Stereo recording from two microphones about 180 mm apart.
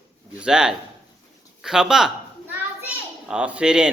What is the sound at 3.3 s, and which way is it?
Speech, 5° right (ahead or behind).